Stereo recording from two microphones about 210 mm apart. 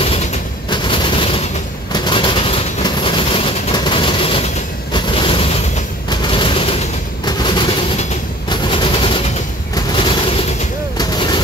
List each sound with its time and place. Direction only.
0.7 s gunshot: 25° left (ahead or behind)
1.9 s vehicle: 20° left (ahead or behind)
4.9 s a sound: 25° left (ahead or behind)
6.0 s fusillade: 25° left (ahead or behind)
7.2 s train: 20° left (ahead or behind)
9.8 s a sound: 25° left (ahead or behind)